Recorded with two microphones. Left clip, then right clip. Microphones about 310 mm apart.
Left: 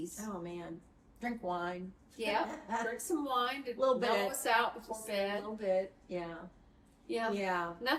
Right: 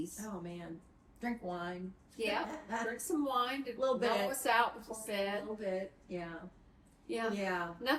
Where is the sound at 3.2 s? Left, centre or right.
Centre.